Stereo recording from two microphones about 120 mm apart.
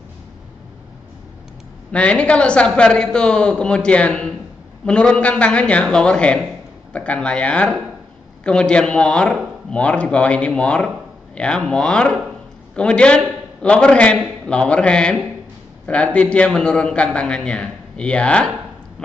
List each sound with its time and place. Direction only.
1.9 s a man's voice: 10° left (ahead or behind)